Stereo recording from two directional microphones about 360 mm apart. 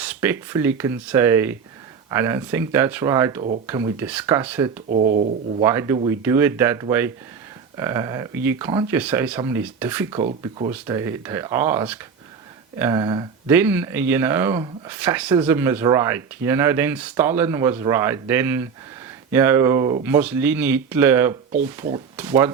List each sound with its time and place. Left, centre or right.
0.0 s speech: centre
4.9 s speech: right
5.6 s speech: centre